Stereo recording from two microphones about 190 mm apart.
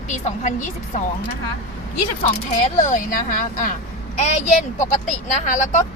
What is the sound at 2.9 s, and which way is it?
Speech, 40° left (ahead or behind).